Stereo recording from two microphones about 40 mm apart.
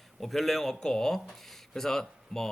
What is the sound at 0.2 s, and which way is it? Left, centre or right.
Speech, centre.